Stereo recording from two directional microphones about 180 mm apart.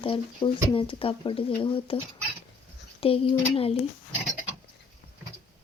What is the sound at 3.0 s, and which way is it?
Speech, 30° left (ahead or behind).